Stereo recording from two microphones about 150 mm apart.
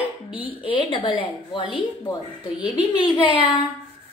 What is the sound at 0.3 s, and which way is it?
A woman's voice, 35° left (ahead or behind).